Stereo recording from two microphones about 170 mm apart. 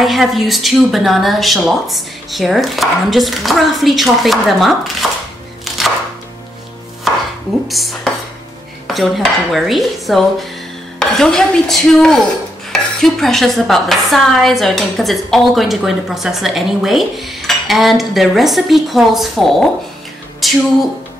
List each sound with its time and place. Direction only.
0.0 s dishes: centre (ahead or behind)
7.1 s chopping: centre (ahead or behind)
7.6 s dishes: centre (ahead or behind)
20.4 s speech: centre (ahead or behind)